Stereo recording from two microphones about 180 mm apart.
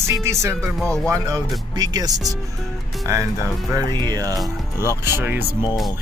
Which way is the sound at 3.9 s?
20° right (ahead or behind).